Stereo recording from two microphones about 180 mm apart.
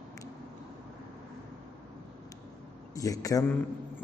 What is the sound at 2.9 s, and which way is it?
Speech, 20° left (ahead or behind).